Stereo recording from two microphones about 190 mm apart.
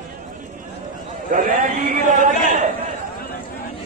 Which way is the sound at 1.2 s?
45° right (ahead or behind).